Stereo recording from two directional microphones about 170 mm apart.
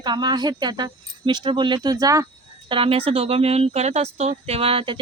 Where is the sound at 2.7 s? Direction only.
30° right (ahead or behind).